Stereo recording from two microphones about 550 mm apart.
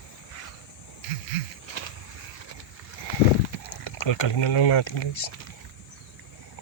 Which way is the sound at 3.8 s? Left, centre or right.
Left.